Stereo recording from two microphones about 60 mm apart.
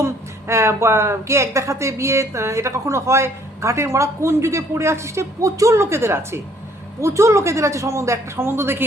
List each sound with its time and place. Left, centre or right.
0.0 s speech: right
5.8 s a man's voice: right